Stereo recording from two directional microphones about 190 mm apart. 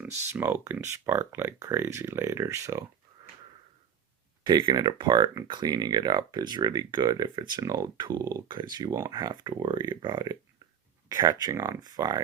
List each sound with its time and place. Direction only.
0.3 s speech: 10° right (ahead or behind)
4.4 s speech: 25° right (ahead or behind)